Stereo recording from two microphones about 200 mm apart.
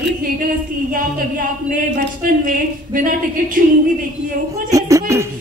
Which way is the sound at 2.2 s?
45° right (ahead or behind).